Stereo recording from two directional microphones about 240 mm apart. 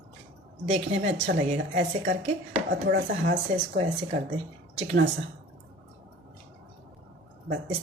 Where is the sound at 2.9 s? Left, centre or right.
Right.